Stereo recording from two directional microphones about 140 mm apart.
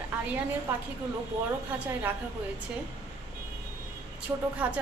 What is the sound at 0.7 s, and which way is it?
Speech, 15° right (ahead or behind).